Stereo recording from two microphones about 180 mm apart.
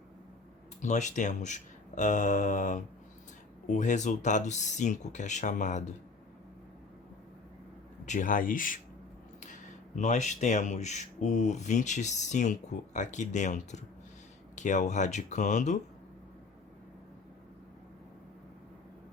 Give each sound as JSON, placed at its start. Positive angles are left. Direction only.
{"t": 0.8, "sound": "speech", "side_deg": 40}
{"t": 8.0, "sound": "speech", "side_deg": 45}